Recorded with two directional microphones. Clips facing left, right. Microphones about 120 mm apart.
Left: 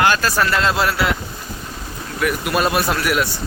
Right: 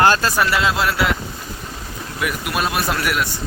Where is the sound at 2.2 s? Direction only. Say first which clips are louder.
Left 4 dB; centre (ahead or behind).